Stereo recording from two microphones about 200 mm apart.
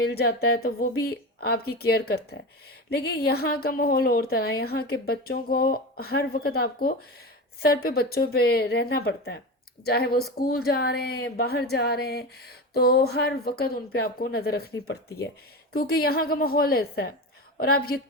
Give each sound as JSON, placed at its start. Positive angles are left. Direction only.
{"t": 0.0, "sound": "a woman's voice", "side_deg": 50}